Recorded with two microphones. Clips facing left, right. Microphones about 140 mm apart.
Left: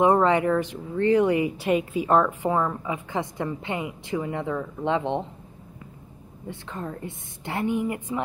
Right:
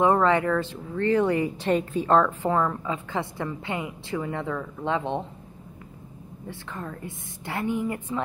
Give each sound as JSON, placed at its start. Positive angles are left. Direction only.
{"t": 0.0, "sound": "speech", "side_deg": 20}
{"t": 6.4, "sound": "a woman's voice", "side_deg": 20}